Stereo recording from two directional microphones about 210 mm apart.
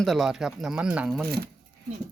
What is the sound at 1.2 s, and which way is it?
Speech, 50° right (ahead or behind).